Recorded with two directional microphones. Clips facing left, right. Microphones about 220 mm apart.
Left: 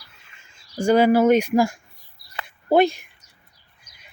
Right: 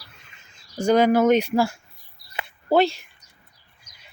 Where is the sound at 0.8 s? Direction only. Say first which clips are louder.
Left 1 dB; 10° left (ahead or behind).